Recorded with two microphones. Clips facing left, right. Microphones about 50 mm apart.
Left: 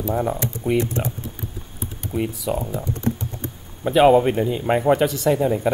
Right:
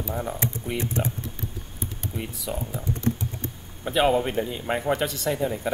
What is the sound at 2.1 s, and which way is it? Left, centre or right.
Speech, centre.